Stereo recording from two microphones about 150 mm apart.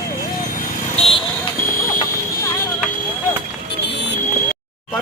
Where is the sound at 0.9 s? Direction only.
40° left (ahead or behind).